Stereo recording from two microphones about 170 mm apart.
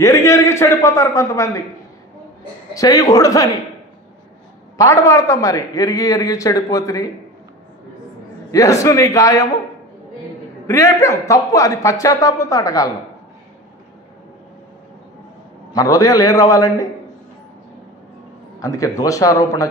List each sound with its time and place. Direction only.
0.0 s a man's voice: 15° left (ahead or behind)
2.7 s a man's voice: 20° left (ahead or behind)
4.7 s a man's voice: 20° left (ahead or behind)
8.5 s a man's voice: 20° left (ahead or behind)
10.7 s a man's voice: 20° left (ahead or behind)
15.7 s a man's voice: 20° left (ahead or behind)
18.6 s a man's voice: 20° left (ahead or behind)